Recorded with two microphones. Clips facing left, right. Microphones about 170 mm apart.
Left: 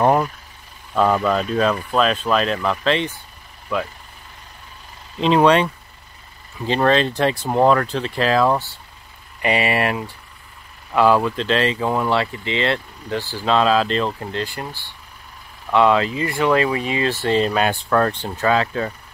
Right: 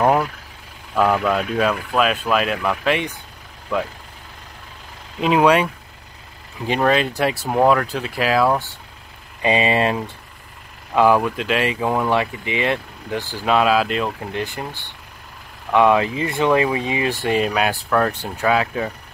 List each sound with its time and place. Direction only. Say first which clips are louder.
0.0 s vehicle: even; 5° right (ahead or behind)
0.9 s speech: even; 5° right (ahead or behind)
5.2 s speech: left 1 dB; 10° right (ahead or behind)
6.7 s speech: left 1 dB; 10° right (ahead or behind)
9.4 s speech: right 2 dB; 20° right (ahead or behind)
14.4 s speech: right 1 dB; 20° right (ahead or behind)